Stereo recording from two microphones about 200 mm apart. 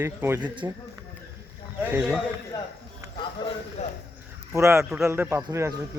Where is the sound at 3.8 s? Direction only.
35° left (ahead or behind).